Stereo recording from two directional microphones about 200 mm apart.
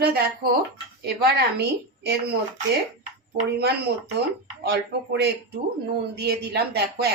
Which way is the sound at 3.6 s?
55° right (ahead or behind).